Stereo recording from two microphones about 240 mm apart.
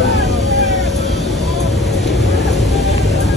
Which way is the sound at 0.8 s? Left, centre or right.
Centre.